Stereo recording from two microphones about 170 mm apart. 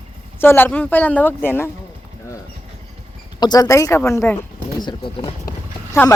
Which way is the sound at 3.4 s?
25° left (ahead or behind).